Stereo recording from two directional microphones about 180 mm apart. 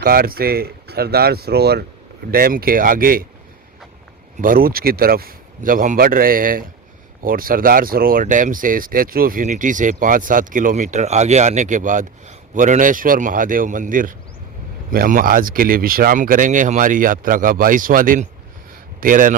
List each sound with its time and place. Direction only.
0.0 s speech: 55° right (ahead or behind)
4.4 s a man's voice: 50° right (ahead or behind)